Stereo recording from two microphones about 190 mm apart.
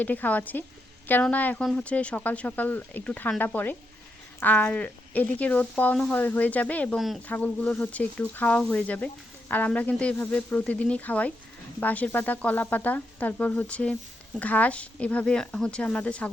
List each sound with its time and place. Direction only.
0.0 s speech: 10° left (ahead or behind)